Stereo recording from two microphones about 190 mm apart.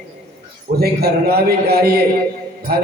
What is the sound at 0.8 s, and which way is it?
A man's voice, 55° right (ahead or behind).